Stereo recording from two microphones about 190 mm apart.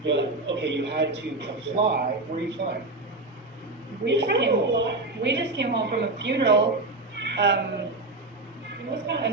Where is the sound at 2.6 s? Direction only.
55° right (ahead or behind).